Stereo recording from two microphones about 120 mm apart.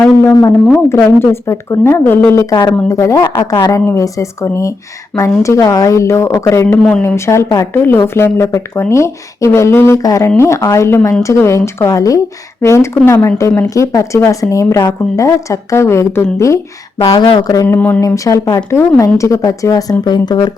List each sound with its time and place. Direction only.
0.9 s speech: 20° left (ahead or behind)
2.5 s speech: 40° left (ahead or behind)
2.9 s speech: 25° left (ahead or behind)
17.7 s speech: 15° left (ahead or behind)
18.0 s speech: 30° left (ahead or behind)